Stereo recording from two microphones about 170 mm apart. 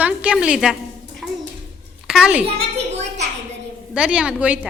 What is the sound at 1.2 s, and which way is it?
Bathtub, centre (ahead or behind).